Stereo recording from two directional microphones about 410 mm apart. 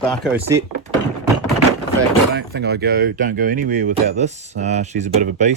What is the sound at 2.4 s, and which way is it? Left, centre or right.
Speech, right.